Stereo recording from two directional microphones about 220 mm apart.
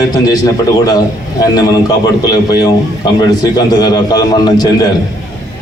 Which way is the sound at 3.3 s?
15° left (ahead or behind).